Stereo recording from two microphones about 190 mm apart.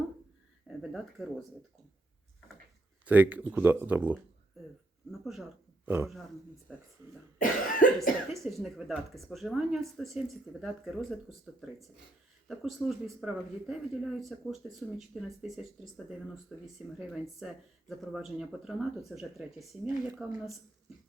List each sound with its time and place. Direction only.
0.7 s speech: centre (ahead or behind)
3.1 s speech: 10° right (ahead or behind)
5.2 s speech: centre (ahead or behind)
7.3 s cough: 45° left (ahead or behind)
8.3 s speech: centre (ahead or behind)